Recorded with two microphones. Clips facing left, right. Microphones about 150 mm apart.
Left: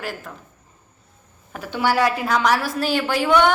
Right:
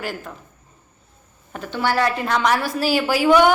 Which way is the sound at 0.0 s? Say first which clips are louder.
Right 2 dB; centre (ahead or behind).